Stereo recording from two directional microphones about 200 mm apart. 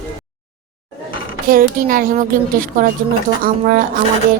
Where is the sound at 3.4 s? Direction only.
45° right (ahead or behind).